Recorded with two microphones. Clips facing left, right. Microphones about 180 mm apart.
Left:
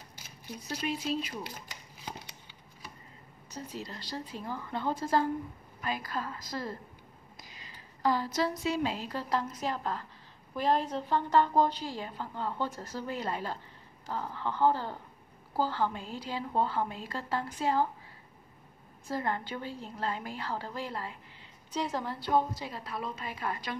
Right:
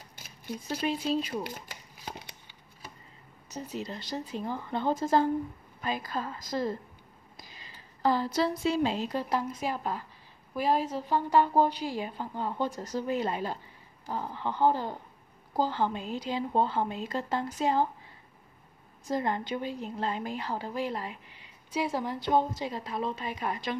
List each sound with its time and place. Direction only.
0.8 s speech: 30° right (ahead or behind)
3.5 s a woman's voice: 20° right (ahead or behind)
7.4 s a woman's voice: 30° right (ahead or behind)
19.0 s a woman's voice: 20° right (ahead or behind)